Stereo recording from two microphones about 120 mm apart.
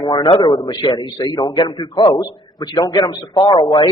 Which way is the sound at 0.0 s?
40° left (ahead or behind).